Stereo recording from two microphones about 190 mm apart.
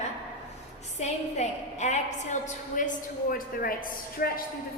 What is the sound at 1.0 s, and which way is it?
A woman's voice, 35° left (ahead or behind).